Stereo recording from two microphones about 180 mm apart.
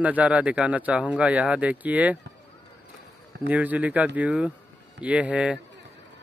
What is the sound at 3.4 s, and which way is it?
Speech, 10° right (ahead or behind).